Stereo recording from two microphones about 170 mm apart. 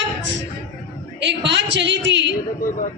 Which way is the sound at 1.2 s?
90° right.